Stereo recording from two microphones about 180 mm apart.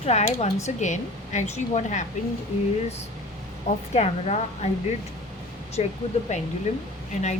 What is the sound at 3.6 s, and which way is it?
Speech, 35° left (ahead or behind).